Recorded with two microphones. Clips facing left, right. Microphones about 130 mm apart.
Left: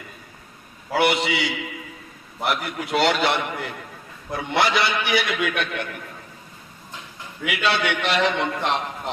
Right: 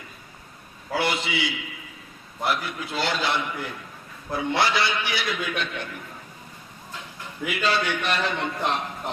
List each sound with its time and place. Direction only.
0.9 s a man's voice: 70° left (ahead or behind)
7.4 s a man's voice: 80° left